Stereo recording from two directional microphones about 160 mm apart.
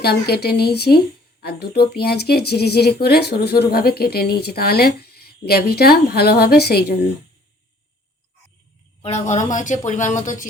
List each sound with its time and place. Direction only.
0.0 s speech: 90° left
9.0 s speech: 40° left (ahead or behind)